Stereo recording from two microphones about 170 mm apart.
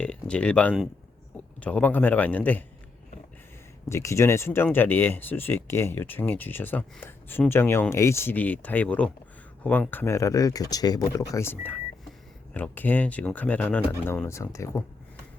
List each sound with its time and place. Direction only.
0.0 s speech: 5° left (ahead or behind)
3.8 s speech: 15° left (ahead or behind)